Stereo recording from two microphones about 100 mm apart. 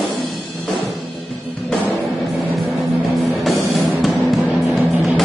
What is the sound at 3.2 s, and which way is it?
Music, centre (ahead or behind).